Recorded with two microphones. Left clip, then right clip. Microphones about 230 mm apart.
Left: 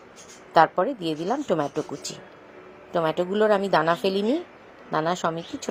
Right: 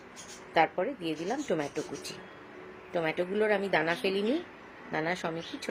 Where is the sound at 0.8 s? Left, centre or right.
Centre.